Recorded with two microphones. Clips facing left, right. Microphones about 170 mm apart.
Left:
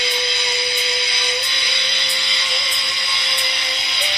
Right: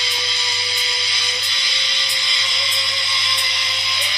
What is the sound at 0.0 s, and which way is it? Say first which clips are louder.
Music: left 6 dB; 60° left (ahead or behind).